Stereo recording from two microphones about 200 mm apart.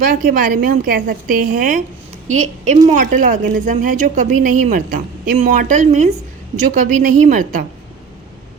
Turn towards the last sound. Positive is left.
turn(degrees=-40)  # may be behind; listen again after turning